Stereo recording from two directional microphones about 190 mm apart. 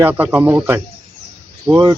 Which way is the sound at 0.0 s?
10° right (ahead or behind).